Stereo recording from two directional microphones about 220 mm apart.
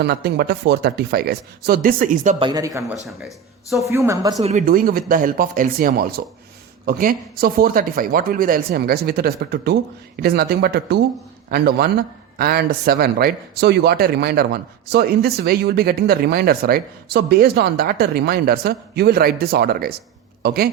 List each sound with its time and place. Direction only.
0.0 s a man's voice: 45° right (ahead or behind)
2.4 s speech: 15° right (ahead or behind)
3.1 s speech: centre (ahead or behind)
3.8 s speech: 15° right (ahead or behind)
4.4 s a man's voice: 35° right (ahead or behind)